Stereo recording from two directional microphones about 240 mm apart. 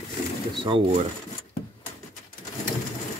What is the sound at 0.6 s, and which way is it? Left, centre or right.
Speech, right.